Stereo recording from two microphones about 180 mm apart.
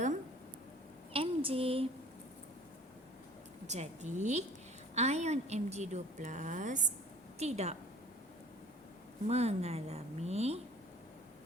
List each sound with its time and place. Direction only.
1.1 s a sound: 30° right (ahead or behind)
3.7 s a woman's voice: 40° right (ahead or behind)
9.2 s a woman's voice: 35° right (ahead or behind)